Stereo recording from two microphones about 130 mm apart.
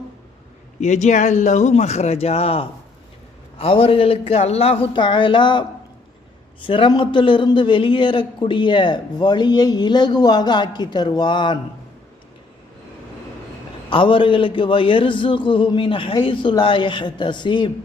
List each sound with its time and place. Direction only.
0.8 s a man's voice: 65° left (ahead or behind); by 11.6 s 35° left (ahead or behind)
13.9 s a man's voice: 40° left (ahead or behind)